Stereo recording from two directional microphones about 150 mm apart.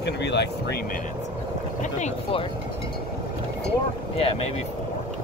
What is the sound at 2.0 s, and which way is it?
Speech, 40° left (ahead or behind).